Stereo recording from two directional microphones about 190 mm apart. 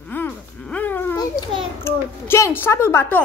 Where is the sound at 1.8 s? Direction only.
15° left (ahead or behind).